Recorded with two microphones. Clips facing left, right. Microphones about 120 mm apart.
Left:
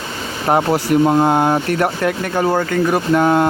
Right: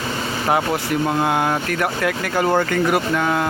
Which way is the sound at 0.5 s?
40° left (ahead or behind).